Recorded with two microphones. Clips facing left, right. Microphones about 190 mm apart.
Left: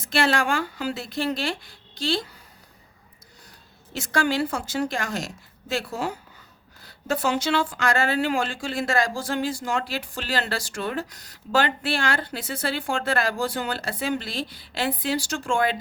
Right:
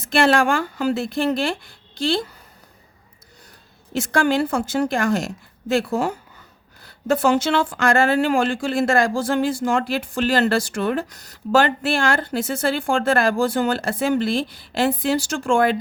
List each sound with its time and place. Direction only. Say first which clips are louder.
0.1 s speech: right 6 dB; 50° right (ahead or behind)
3.9 s speech: right 5 dB; 55° right (ahead or behind)